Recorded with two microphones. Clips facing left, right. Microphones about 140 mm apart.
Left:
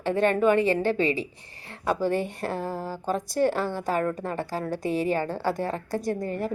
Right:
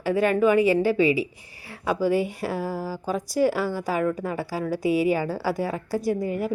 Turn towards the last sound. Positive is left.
turn(degrees=-10)  # may be behind; listen again after turning